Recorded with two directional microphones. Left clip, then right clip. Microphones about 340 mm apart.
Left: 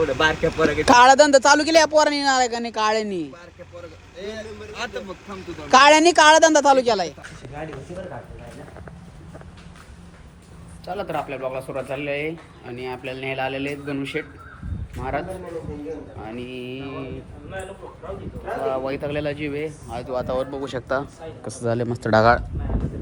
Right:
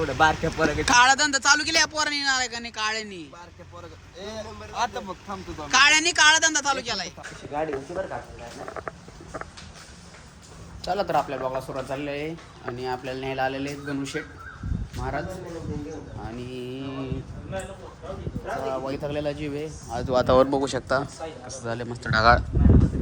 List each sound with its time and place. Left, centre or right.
0.0 s speech: centre
4.7 s speech: centre
5.6 s speech: centre
10.8 s a man's voice: centre
16.2 s speech: centre
18.7 s speech: centre
20.1 s speech: right
20.5 s speech: centre
21.4 s a man's voice: centre
22.2 s speech: centre